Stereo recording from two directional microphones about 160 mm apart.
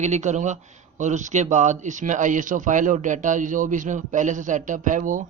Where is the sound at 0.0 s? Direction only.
50° right (ahead or behind).